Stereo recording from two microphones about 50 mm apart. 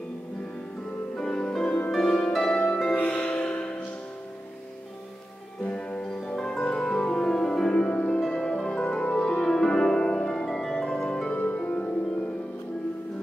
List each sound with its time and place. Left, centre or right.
1.1 s music: centre
2.0 s harp: left
3.1 s music: left
5.6 s music: left
7.7 s music: left
9.4 s harp: centre
11.3 s music: left